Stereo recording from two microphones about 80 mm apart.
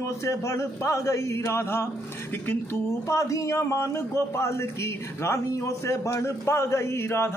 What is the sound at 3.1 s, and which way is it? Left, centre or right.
A man's voice, left.